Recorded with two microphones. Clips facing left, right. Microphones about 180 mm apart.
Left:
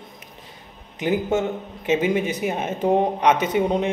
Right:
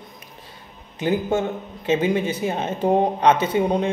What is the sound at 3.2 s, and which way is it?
Speech, 15° left (ahead or behind).